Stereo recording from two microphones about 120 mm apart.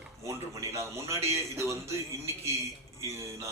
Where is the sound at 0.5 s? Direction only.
25° right (ahead or behind).